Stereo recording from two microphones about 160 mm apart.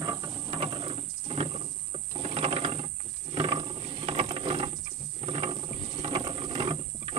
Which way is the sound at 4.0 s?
35° right (ahead or behind).